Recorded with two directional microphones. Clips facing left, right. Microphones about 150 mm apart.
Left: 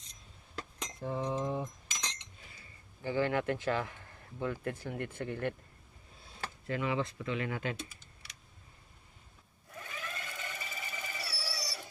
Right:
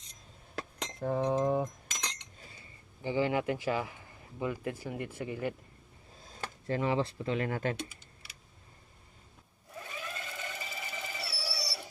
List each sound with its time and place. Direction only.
0.5 s cutlery: 60° right (ahead or behind)
3.0 s speech: 15° right (ahead or behind)
6.7 s speech: 35° right (ahead or behind)
9.7 s a sound: 20° right (ahead or behind)